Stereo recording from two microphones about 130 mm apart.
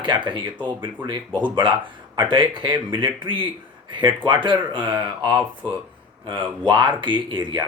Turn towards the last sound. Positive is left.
turn(degrees=-35)  # may be behind; listen again after turning